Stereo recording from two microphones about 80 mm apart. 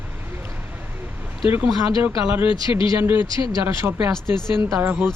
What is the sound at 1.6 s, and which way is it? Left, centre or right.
Speech, left.